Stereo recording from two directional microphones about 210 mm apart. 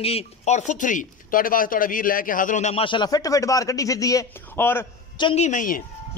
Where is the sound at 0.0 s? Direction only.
30° left (ahead or behind); by 4.8 s 10° left (ahead or behind).